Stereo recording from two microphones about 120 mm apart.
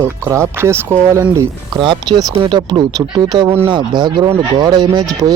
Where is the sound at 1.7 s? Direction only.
40° right (ahead or behind).